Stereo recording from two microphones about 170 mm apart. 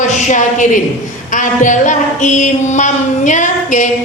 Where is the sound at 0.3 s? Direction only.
45° left (ahead or behind).